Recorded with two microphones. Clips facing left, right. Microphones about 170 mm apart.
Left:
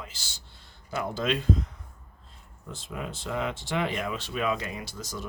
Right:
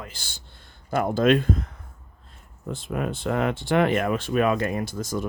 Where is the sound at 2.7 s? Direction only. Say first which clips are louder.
Right 9 dB; 55° right (ahead or behind).